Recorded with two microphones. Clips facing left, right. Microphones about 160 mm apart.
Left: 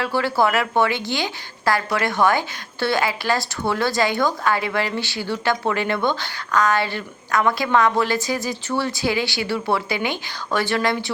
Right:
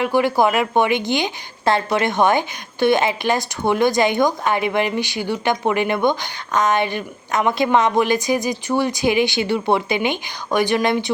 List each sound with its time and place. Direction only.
0.0 s a woman's voice: 15° right (ahead or behind)